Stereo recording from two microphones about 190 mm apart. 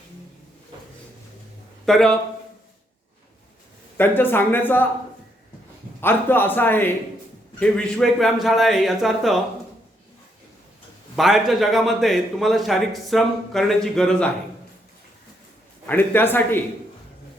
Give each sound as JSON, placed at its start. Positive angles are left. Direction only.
{"t": 1.8, "sound": "speech", "side_deg": 0}
{"t": 3.9, "sound": "a man's voice", "side_deg": 10}
{"t": 6.0, "sound": "a man's voice", "side_deg": 10}
{"t": 11.2, "sound": "a man's voice", "side_deg": 0}
{"t": 15.9, "sound": "a man's voice", "side_deg": 10}